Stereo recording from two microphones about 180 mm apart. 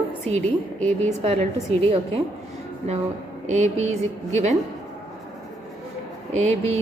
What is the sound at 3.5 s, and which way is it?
A woman's voice, 40° right (ahead or behind).